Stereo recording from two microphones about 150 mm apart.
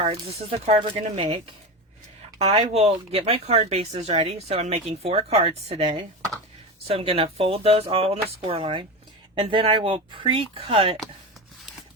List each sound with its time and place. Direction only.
0.0 s speech: 40° right (ahead or behind)
2.5 s speech: 45° right (ahead or behind)